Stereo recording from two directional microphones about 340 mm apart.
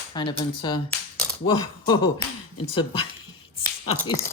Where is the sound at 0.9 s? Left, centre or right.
Centre.